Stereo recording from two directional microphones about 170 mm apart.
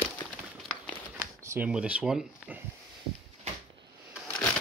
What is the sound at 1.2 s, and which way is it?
Speech, 15° right (ahead or behind).